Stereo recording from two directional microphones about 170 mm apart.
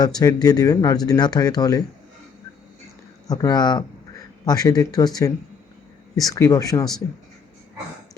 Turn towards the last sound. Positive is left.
turn(degrees=20)  # may be behind; listen again after turning